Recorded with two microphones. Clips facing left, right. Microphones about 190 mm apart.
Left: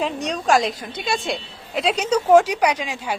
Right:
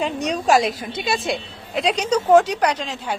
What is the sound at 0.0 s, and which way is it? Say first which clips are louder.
A woman's voice: right 2 dB; centre (ahead or behind).